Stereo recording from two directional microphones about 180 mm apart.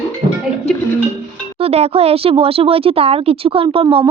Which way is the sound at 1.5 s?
35° right (ahead or behind).